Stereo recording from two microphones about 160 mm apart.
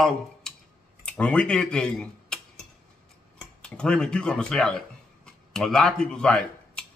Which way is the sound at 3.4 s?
5° left (ahead or behind).